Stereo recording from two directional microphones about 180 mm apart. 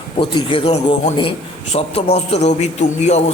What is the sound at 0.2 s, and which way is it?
A man's voice, 30° left (ahead or behind).